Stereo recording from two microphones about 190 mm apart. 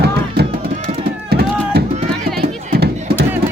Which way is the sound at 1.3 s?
55° right (ahead or behind).